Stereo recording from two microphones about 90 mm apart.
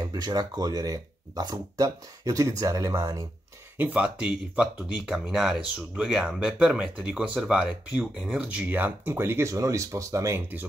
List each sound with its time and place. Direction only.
0.1 s speech: 50° right (ahead or behind)
3.7 s speech: 15° right (ahead or behind); by 10.4 s 35° right (ahead or behind)